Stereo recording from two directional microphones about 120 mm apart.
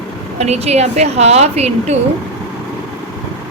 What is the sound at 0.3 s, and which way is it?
Speech, 65° right (ahead or behind).